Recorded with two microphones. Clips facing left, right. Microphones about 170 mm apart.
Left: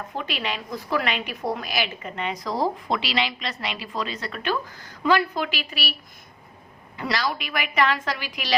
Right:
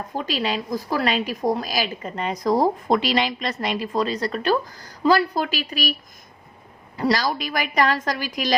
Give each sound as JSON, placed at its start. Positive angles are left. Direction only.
{"t": 0.2, "sound": "a woman's voice", "side_deg": -35}